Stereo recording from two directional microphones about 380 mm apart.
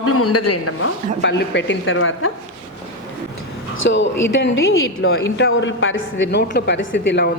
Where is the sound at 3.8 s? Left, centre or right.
Left.